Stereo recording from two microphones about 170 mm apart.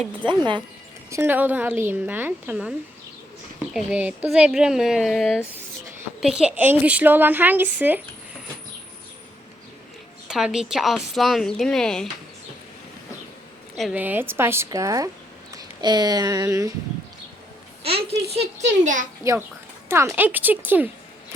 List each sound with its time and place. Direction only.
0.3 s speech: 30° right (ahead or behind)
1.1 s a woman's voice: 10° right (ahead or behind)
10.2 s a woman's voice: 5° right (ahead or behind)
13.7 s a woman's voice: 5° right (ahead or behind); by 16.7 s 20° right (ahead or behind)
17.8 s speech: 35° right (ahead or behind)
19.2 s a woman's voice: 15° right (ahead or behind)